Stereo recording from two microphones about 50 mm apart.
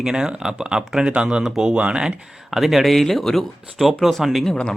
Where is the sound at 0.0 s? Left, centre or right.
Centre.